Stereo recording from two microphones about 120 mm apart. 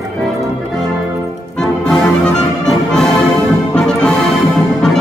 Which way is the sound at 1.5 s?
5° left (ahead or behind).